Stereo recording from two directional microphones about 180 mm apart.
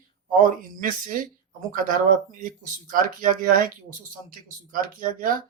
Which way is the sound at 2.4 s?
45° right (ahead or behind).